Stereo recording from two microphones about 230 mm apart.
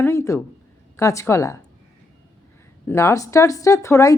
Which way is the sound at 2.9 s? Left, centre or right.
Centre.